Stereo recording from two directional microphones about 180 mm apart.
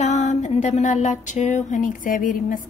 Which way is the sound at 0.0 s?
40° left (ahead or behind).